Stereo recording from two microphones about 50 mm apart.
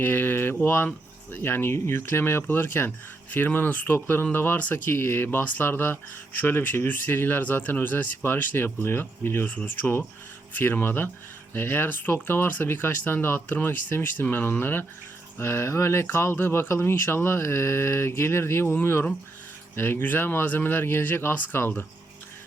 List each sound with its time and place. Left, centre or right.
0.0 s speech: left
4.7 s speech: left
9.5 s speech: left
10.6 s speech: left
15.4 s speech: left